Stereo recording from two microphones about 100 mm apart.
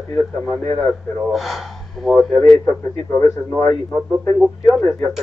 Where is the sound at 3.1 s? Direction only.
25° left (ahead or behind).